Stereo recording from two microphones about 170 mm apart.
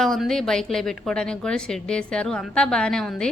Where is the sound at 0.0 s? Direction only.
Centre (ahead or behind).